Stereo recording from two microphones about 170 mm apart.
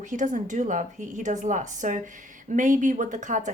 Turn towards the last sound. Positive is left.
turn(degrees=-45)  # may be behind; listen again after turning